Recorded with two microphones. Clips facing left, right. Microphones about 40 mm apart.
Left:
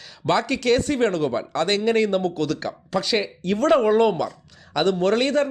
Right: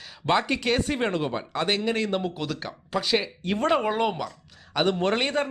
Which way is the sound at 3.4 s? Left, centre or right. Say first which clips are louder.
Left 9 dB; centre.